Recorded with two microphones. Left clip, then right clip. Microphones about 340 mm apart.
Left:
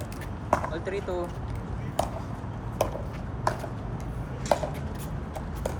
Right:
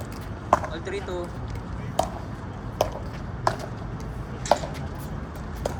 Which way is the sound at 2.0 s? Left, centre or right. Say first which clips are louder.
Right 3 dB; right.